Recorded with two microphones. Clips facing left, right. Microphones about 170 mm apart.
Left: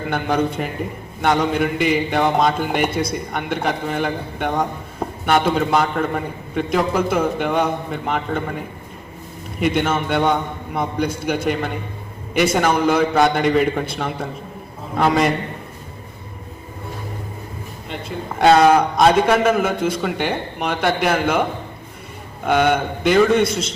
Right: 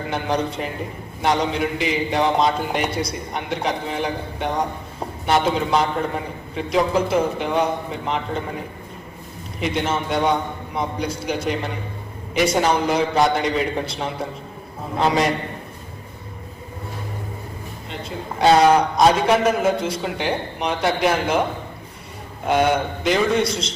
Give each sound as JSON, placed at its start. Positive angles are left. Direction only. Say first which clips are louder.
{"t": 0.1, "sound": "a man's voice", "louder": "left 3 dB", "side_deg": 55}
{"t": 9.6, "sound": "a man's voice", "louder": "left 4 dB", "side_deg": 55}
{"t": 18.3, "sound": "a man's voice", "louder": "left 2 dB", "side_deg": 55}
{"t": 22.4, "sound": "a man's voice", "louder": "left 1 dB", "side_deg": 60}